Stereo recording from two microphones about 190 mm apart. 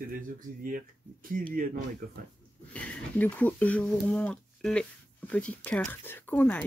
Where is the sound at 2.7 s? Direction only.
5° left (ahead or behind).